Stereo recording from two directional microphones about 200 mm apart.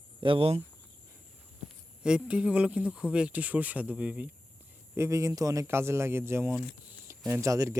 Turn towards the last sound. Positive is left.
turn(degrees=-15)  # may be behind; listen again after turning